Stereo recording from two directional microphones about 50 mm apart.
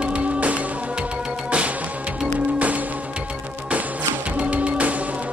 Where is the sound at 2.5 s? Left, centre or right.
Right.